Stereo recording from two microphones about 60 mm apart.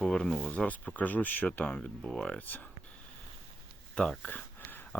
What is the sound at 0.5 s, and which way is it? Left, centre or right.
Speech, left.